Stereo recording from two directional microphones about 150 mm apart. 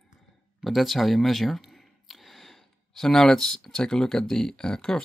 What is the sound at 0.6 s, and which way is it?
Speech, centre (ahead or behind).